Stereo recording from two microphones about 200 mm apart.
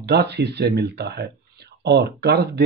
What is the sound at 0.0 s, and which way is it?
A man's voice, 55° right (ahead or behind).